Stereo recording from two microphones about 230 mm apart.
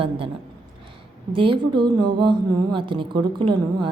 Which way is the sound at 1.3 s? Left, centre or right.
Right.